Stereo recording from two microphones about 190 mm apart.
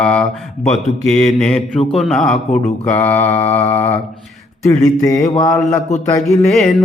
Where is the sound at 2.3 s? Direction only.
35° left (ahead or behind).